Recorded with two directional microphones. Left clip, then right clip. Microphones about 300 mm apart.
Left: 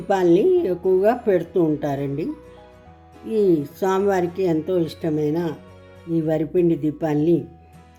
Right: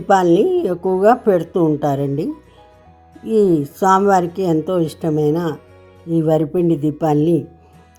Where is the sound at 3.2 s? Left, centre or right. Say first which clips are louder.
Right 4 dB; centre.